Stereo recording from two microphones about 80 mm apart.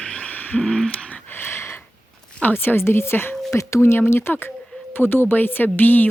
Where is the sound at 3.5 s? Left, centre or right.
Left.